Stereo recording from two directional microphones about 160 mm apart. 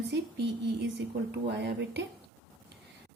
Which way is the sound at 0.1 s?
90° right.